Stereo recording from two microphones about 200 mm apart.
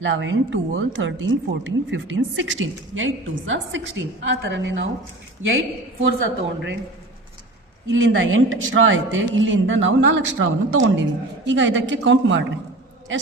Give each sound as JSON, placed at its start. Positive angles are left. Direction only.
{"t": 0.0, "sound": "a man's voice", "side_deg": -70}
{"t": 5.4, "sound": "a man's voice", "side_deg": -75}
{"t": 7.9, "sound": "a man's voice", "side_deg": -70}